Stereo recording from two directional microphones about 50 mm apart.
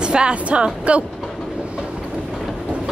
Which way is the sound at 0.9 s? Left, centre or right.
Right.